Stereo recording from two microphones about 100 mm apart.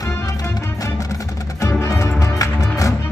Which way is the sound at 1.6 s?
35° left (ahead or behind).